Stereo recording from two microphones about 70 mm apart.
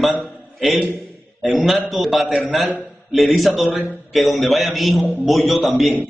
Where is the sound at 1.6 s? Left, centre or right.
Centre.